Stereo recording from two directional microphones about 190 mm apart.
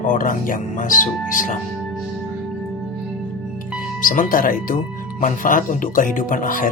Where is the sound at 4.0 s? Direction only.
45° left (ahead or behind).